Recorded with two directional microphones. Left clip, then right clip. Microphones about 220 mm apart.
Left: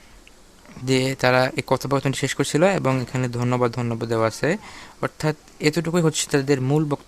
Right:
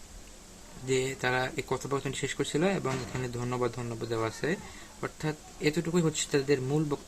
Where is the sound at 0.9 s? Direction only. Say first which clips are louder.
Left 10 dB; 55° left (ahead or behind).